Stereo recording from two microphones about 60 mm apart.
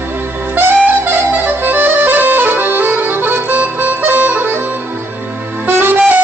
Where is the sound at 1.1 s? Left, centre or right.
Right.